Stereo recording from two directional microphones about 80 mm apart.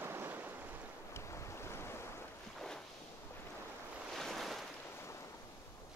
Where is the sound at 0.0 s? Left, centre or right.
Right.